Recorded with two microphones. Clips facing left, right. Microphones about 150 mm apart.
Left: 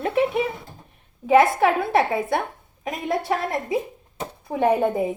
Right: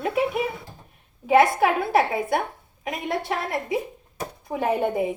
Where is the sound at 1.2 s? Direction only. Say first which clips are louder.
Left 1 dB; 40° left (ahead or behind).